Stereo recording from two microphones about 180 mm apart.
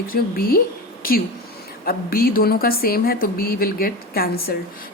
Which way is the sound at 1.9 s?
55° left (ahead or behind).